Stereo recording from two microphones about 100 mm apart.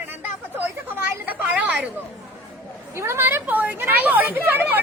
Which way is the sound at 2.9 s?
25° right (ahead or behind).